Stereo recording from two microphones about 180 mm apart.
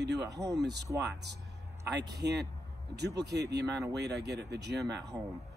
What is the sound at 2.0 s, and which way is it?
Speech, 70° right (ahead or behind).